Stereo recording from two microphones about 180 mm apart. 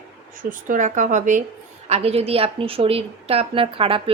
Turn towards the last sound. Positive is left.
turn(degrees=-30)  # may be behind; listen again after turning